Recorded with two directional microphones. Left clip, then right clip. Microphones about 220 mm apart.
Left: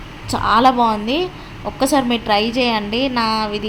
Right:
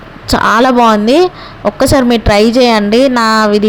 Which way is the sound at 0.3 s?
35° right (ahead or behind).